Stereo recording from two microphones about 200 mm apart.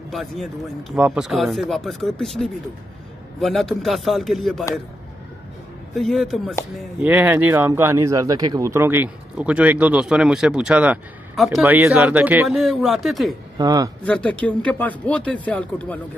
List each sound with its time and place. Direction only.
0.1 s a man's voice: centre (ahead or behind)
5.9 s a man's voice: centre (ahead or behind)
13.6 s speech: 20° right (ahead or behind)
14.0 s speech: 5° left (ahead or behind)